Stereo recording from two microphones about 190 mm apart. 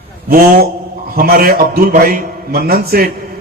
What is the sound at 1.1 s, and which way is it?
A man's voice, 50° right (ahead or behind).